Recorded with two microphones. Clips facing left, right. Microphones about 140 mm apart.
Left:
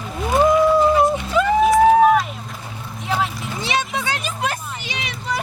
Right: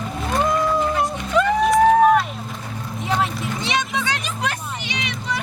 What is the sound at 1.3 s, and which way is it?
Music, 5° left (ahead or behind).